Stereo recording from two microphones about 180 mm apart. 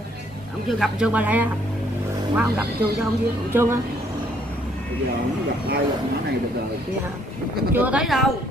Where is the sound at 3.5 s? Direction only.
15° right (ahead or behind).